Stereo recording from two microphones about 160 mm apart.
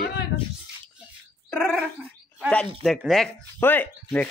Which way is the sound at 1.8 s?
5° right (ahead or behind).